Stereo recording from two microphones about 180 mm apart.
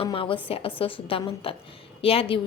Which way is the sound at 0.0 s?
30° left (ahead or behind).